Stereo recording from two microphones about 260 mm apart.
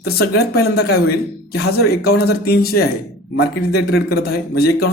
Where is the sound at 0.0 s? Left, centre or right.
Left.